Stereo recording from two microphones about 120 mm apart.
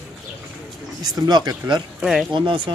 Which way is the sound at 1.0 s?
35° right (ahead or behind).